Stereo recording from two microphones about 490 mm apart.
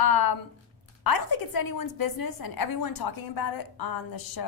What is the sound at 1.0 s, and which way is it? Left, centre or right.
A woman's voice, left.